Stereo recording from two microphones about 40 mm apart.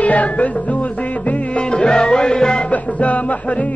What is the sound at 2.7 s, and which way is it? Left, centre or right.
Music, left.